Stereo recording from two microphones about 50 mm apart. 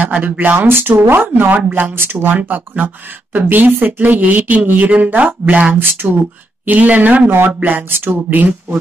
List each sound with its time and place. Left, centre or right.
0.2 s speech: right
0.6 s speech: right
7.2 s speech: right
7.7 s speech: right